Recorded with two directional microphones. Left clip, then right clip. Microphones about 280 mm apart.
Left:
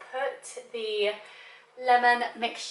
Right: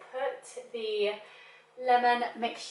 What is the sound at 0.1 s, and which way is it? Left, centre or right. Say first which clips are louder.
A woman's voice: left 2 dB; centre.